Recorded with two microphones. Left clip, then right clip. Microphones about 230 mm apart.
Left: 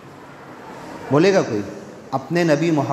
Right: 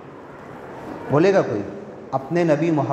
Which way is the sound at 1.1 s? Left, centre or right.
Left.